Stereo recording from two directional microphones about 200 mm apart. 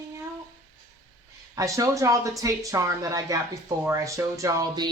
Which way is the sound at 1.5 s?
15° right (ahead or behind).